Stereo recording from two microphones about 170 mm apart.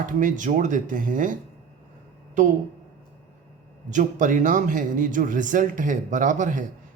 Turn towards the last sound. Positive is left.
turn(degrees=-50)  # may be behind; listen again after turning